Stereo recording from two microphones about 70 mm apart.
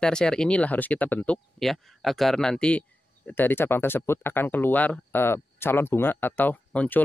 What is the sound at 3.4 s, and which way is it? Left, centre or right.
Speech, left.